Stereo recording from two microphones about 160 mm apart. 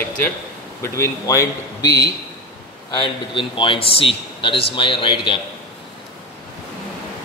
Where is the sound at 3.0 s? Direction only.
30° left (ahead or behind).